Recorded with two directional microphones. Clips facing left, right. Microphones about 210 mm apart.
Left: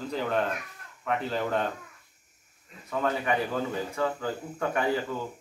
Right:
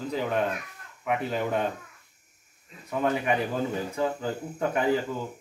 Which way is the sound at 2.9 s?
15° right (ahead or behind).